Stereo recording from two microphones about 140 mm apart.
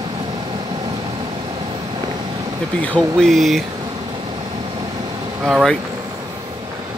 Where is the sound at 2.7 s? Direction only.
10° left (ahead or behind).